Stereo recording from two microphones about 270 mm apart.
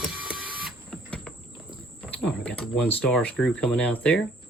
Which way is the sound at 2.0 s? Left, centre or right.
Centre.